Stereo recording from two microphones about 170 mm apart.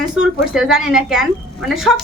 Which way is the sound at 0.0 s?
Centre (ahead or behind).